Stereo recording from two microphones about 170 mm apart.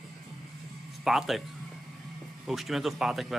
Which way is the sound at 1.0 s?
Centre (ahead or behind).